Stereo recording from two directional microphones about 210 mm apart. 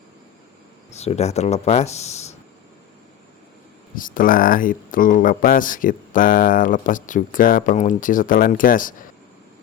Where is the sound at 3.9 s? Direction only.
40° left (ahead or behind).